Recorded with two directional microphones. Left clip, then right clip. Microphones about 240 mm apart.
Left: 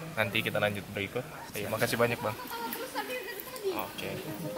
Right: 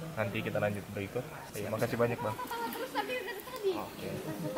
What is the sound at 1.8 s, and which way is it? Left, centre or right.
Speech, centre.